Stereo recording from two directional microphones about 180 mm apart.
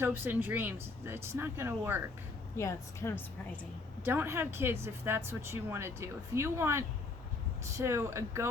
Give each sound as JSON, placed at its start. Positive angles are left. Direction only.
{"t": 0.0, "sound": "speech", "side_deg": -10}
{"t": 2.6, "sound": "a woman's voice", "side_deg": 15}
{"t": 4.0, "sound": "speech", "side_deg": -10}